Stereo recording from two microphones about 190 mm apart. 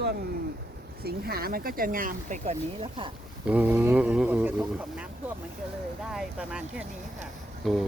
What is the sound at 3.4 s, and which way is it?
Speech, 5° right (ahead or behind).